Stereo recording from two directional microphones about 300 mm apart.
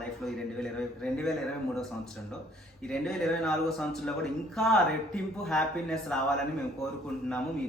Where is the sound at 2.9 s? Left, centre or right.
Centre.